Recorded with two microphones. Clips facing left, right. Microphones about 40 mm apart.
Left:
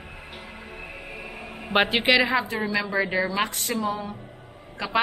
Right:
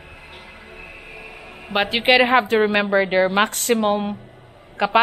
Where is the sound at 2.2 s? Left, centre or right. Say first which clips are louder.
Right 7 dB; right.